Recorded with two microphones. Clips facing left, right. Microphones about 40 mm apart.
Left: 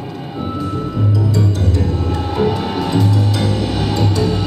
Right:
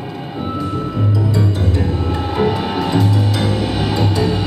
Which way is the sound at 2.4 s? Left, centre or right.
Centre.